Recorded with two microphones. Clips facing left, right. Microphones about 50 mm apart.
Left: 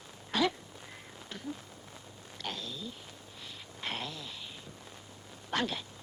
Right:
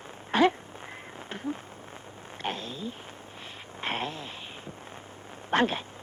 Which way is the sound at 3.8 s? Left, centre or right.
Right.